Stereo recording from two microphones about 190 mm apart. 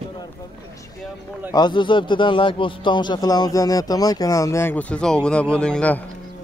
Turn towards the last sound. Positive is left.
turn(degrees=5)  # may be behind; listen again after turning